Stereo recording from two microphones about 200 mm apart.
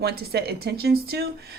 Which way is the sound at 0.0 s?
55° right (ahead or behind).